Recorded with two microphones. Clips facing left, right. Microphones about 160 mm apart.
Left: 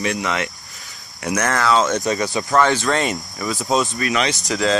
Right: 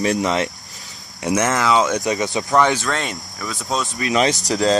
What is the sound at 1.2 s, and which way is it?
Speech, 20° right (ahead or behind).